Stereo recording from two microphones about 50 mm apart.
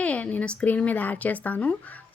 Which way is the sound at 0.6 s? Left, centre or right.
Left.